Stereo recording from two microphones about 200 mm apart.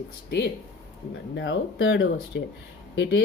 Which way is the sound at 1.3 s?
65° left (ahead or behind).